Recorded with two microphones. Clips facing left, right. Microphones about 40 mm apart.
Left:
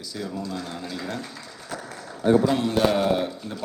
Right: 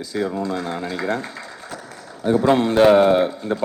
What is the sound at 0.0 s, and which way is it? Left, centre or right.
Speech, right.